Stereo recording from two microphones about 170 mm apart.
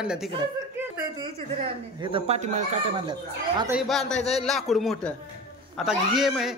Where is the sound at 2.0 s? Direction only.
30° right (ahead or behind).